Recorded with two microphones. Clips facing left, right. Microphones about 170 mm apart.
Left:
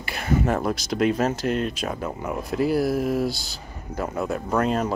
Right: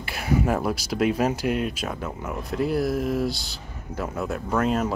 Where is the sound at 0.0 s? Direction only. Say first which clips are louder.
Even; 5° right (ahead or behind).